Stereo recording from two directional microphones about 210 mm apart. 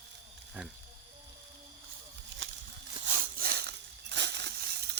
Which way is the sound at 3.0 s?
40° right (ahead or behind).